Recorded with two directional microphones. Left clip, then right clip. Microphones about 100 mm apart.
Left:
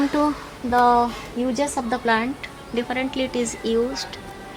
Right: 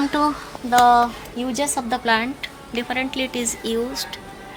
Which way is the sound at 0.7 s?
20° right (ahead or behind).